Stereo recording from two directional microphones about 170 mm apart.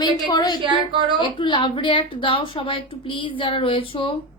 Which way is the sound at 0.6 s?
30° right (ahead or behind).